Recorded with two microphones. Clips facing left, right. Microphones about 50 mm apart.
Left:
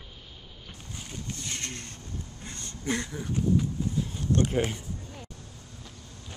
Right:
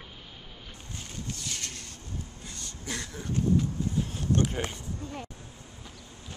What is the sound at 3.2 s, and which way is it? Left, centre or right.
Speech, centre.